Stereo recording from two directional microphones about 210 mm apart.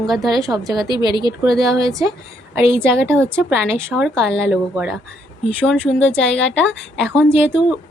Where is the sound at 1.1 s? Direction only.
20° left (ahead or behind).